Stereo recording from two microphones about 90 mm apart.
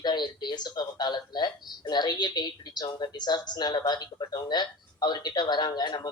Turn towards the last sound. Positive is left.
turn(degrees=55)  # may be behind; listen again after turning